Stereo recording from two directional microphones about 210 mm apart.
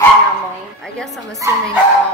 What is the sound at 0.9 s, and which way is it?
Speech, centre (ahead or behind).